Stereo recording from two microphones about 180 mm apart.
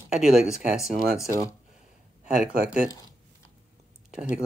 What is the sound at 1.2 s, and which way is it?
Speech, 15° left (ahead or behind).